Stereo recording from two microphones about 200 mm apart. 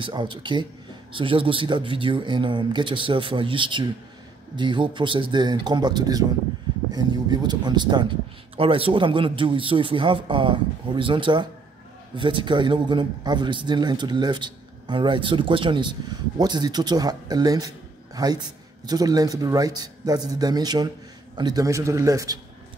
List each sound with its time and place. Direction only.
0.0 s a man's voice: 25° right (ahead or behind)